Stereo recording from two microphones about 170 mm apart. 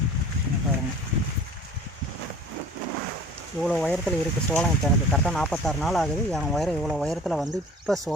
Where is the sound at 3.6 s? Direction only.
5° left (ahead or behind).